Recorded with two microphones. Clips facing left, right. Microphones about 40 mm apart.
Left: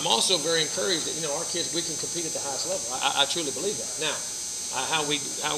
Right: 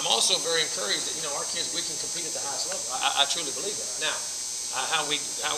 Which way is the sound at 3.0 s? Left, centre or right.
Centre.